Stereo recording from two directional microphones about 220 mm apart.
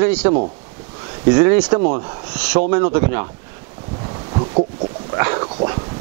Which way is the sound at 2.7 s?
15° right (ahead or behind).